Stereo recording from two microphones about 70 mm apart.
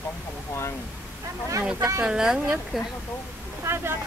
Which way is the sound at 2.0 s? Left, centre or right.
Centre.